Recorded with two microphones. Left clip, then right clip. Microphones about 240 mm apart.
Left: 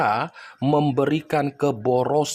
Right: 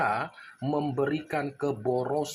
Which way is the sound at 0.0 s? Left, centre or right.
Left.